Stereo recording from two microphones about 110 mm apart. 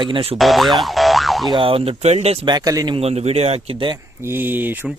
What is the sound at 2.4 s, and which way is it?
Speech, 40° right (ahead or behind).